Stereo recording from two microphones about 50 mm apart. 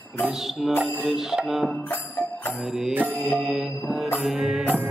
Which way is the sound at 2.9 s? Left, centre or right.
Right.